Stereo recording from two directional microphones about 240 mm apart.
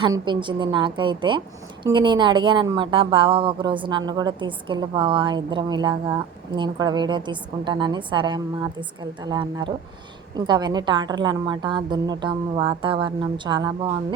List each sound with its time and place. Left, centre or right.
0.0 s a woman's voice: centre